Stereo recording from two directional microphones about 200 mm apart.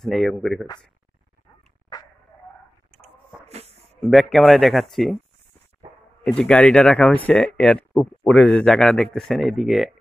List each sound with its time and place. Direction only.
0.0 s speech: centre (ahead or behind)
3.4 s a sound: 30° right (ahead or behind)
4.0 s speech: centre (ahead or behind)
6.2 s speech: 5° left (ahead or behind)